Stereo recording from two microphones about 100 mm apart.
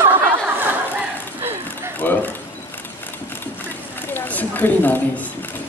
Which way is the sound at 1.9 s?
20° left (ahead or behind).